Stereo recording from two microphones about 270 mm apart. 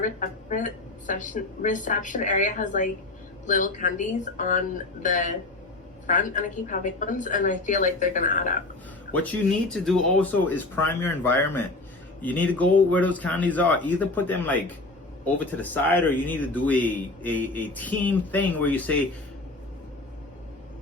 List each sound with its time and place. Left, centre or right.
0.0 s speech: left
9.1 s a man's voice: centre